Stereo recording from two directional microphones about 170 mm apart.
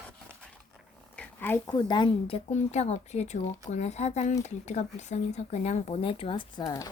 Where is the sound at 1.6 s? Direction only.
25° left (ahead or behind).